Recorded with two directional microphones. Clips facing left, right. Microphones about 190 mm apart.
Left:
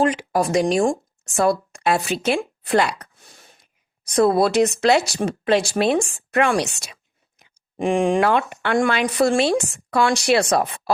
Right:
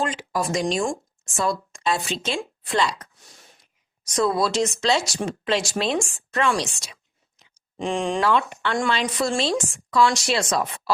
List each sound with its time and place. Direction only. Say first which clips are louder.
0.1 s speech: left 6 dB; 60° left (ahead or behind)
6.1 s a sound: left 4 dB; 55° left (ahead or behind)
7.9 s speech: left 4 dB; 55° left (ahead or behind)